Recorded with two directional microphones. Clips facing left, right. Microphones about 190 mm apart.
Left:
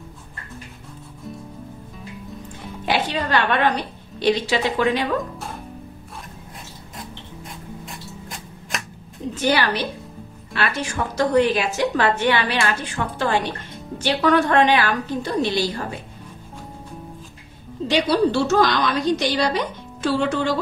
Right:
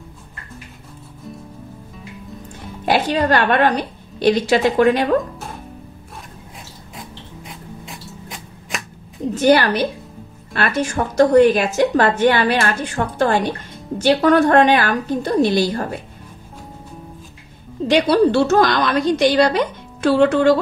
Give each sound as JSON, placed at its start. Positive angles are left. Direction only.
{"t": 2.8, "sound": "a woman's voice", "side_deg": -45}
{"t": 7.0, "sound": "music", "side_deg": 0}
{"t": 9.3, "sound": "a woman's voice", "side_deg": -45}
{"t": 17.8, "sound": "a woman's voice", "side_deg": -55}